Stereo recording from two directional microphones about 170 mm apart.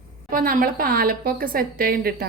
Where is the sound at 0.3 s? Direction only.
55° right (ahead or behind).